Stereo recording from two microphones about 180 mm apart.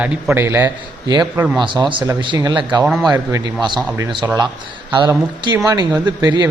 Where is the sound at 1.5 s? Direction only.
25° right (ahead or behind).